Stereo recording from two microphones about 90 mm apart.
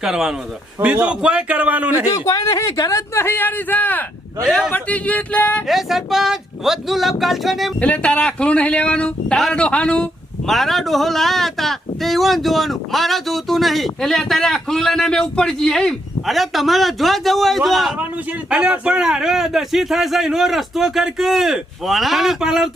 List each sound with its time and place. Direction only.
0.0 s speech: 5° right (ahead or behind)
0.8 s a man's voice: 15° right (ahead or behind)
2.0 s speech: 40° left (ahead or behind)
3.2 s speech: 25° left (ahead or behind)
5.6 s speech: centre (ahead or behind)
7.8 s a man's voice: 15° left (ahead or behind)
17.9 s speech: 15° right (ahead or behind)